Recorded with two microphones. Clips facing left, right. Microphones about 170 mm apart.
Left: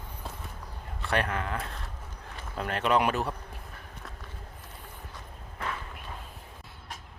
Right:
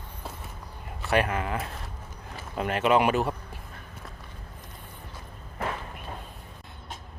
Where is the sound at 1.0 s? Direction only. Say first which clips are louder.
Right 4 dB; 5° right (ahead or behind).